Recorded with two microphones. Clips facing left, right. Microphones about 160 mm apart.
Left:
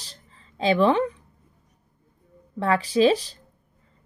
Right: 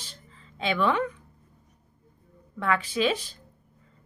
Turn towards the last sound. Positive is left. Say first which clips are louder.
# left 7 dB
turn(degrees=35)  # may be behind; listen again after turning